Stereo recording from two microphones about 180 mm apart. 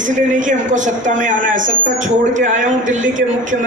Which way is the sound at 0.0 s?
45° right (ahead or behind).